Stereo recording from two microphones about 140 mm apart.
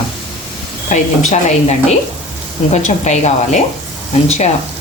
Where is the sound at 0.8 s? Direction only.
60° left (ahead or behind).